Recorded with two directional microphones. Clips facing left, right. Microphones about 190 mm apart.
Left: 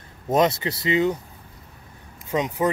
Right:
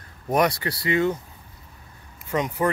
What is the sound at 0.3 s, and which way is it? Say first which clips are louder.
Speech: left 2 dB; 20° left (ahead or behind).